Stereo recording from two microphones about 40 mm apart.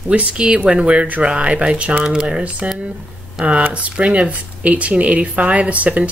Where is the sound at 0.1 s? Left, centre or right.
Right.